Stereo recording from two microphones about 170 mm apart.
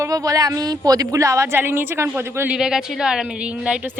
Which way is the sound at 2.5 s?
5° right (ahead or behind).